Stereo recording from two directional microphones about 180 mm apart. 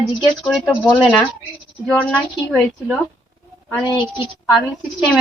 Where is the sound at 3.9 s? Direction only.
20° left (ahead or behind).